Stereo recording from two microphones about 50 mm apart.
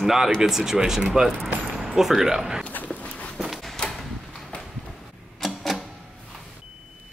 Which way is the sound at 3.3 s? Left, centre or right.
Centre.